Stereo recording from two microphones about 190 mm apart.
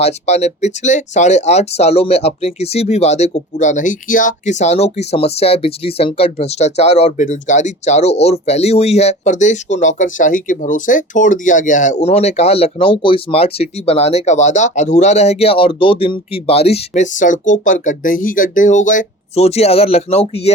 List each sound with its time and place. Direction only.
0.0 s speech: 35° left (ahead or behind)